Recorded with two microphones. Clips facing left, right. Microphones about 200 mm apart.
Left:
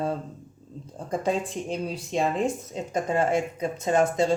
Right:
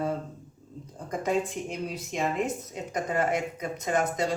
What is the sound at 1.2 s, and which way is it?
Speech, 30° left (ahead or behind).